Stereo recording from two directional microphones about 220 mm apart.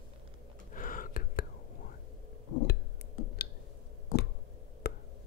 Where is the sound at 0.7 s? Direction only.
40° left (ahead or behind).